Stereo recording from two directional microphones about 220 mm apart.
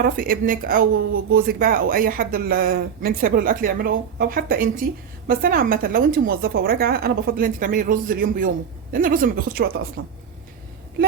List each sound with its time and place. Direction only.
0.0 s speech: 40° right (ahead or behind)